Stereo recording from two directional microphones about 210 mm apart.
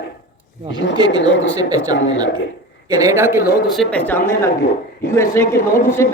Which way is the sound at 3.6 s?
Centre (ahead or behind).